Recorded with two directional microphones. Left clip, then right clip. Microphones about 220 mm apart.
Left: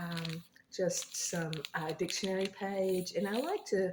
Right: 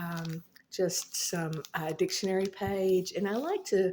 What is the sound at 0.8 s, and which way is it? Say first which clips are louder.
Speech: right 3 dB; 35° right (ahead or behind).